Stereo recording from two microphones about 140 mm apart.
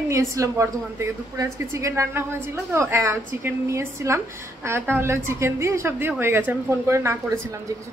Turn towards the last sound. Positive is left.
turn(degrees=-20)  # may be behind; listen again after turning